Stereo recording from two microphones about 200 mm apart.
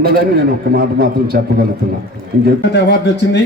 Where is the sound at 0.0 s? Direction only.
50° right (ahead or behind).